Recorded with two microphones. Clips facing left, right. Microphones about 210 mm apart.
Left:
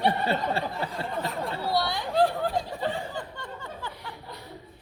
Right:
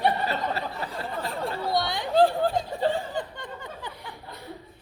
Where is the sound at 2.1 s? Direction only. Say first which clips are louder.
Right 4 dB; 30° right (ahead or behind).